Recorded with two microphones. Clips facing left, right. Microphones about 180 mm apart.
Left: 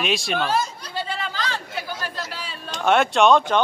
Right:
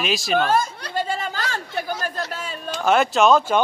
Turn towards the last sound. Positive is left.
turn(degrees=0)  # may be behind; listen again after turning